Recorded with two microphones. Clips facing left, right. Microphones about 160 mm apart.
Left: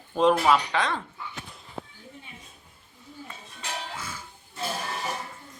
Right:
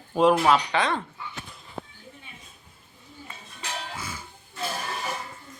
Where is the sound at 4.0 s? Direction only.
5° right (ahead or behind).